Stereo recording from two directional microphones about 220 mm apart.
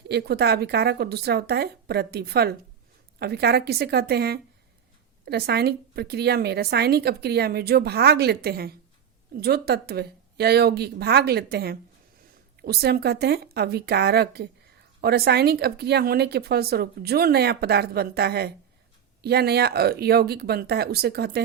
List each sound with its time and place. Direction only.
0.1 s a woman's voice: 45° right (ahead or behind)